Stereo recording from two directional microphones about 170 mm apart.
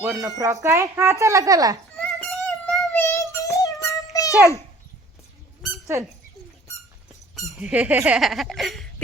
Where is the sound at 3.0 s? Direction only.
15° left (ahead or behind).